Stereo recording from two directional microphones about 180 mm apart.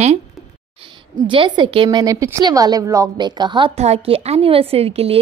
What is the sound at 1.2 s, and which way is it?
A woman's voice, 25° right (ahead or behind).